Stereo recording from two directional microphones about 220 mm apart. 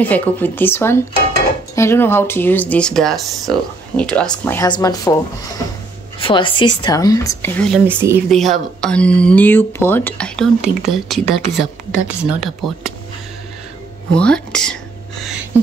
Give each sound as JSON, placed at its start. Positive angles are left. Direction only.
{"t": 0.0, "sound": "speech", "side_deg": 5}
{"t": 4.6, "sound": "speech", "side_deg": 20}
{"t": 7.8, "sound": "speech", "side_deg": -10}
{"t": 8.3, "sound": "speech", "side_deg": 0}
{"t": 14.1, "sound": "speech", "side_deg": 5}